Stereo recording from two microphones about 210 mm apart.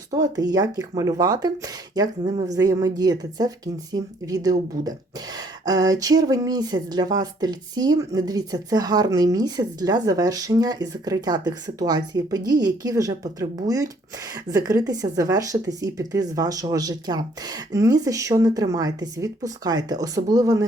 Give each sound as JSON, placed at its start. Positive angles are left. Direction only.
{"t": 0.1, "sound": "speech", "side_deg": -20}